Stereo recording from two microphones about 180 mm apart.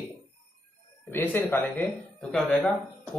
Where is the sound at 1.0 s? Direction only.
10° left (ahead or behind).